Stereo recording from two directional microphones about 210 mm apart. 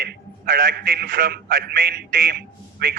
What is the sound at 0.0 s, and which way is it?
A man's voice, 45° right (ahead or behind).